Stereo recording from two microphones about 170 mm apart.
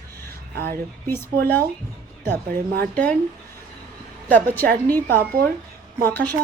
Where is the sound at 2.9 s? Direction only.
10° left (ahead or behind).